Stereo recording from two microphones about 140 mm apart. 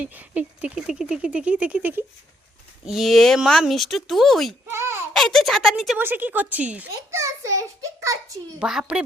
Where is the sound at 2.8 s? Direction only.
Centre (ahead or behind).